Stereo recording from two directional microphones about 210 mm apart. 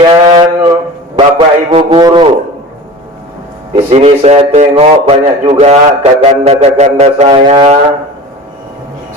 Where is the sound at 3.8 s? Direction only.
30° right (ahead or behind).